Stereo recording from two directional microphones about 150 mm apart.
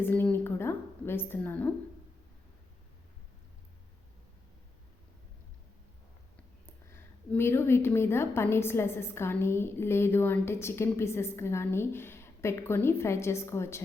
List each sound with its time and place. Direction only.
0.0 s a woman's voice: 15° left (ahead or behind)
6.7 s a woman's voice: 15° left (ahead or behind)